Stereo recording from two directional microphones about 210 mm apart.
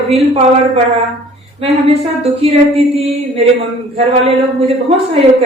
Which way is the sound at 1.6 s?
30° right (ahead or behind).